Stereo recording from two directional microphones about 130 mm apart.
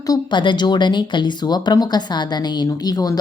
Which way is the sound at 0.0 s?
30° left (ahead or behind).